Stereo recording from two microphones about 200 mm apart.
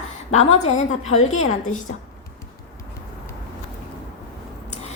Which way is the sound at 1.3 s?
90° left.